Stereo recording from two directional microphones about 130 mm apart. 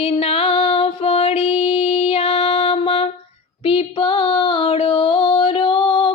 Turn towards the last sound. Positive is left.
turn(degrees=40)  # may be behind; listen again after turning